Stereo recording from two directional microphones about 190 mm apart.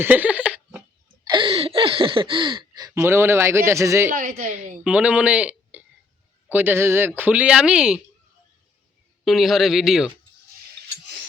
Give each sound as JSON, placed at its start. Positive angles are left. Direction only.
{"t": 0.0, "sound": "a sound", "side_deg": -10}
{"t": 1.2, "sound": "speech", "side_deg": -25}
{"t": 4.1, "sound": "a woman's voice", "side_deg": -45}
{"t": 4.8, "sound": "speech", "side_deg": -5}
{"t": 9.2, "sound": "speech", "side_deg": 0}